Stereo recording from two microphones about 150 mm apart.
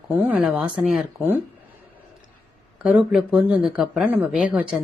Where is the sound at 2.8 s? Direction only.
5° right (ahead or behind).